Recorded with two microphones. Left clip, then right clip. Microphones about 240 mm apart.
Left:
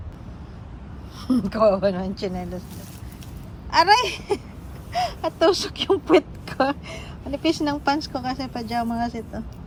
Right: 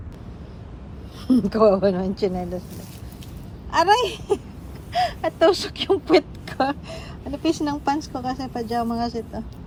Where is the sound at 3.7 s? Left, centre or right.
Centre.